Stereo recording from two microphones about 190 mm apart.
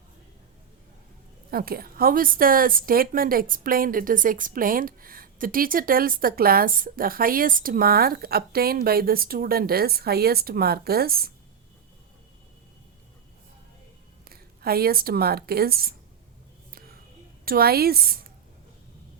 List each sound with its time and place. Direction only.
1.5 s a woman's voice: 50° right (ahead or behind)
14.3 s speech: 55° right (ahead or behind)
17.4 s a woman's voice: 50° right (ahead or behind)